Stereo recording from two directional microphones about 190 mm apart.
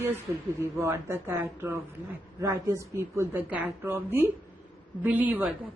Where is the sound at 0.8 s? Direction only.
10° right (ahead or behind).